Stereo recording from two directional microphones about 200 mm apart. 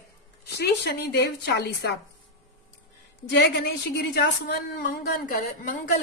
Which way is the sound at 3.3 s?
55° left (ahead or behind).